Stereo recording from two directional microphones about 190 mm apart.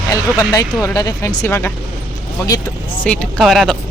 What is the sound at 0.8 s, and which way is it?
Speech, 20° left (ahead or behind).